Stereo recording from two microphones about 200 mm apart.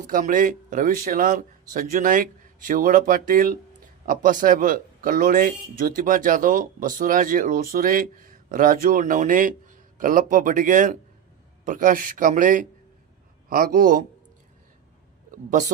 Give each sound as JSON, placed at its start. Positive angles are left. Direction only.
{"t": 0.1, "sound": "speech", "side_deg": -45}
{"t": 15.3, "sound": "a woman's voice", "side_deg": -40}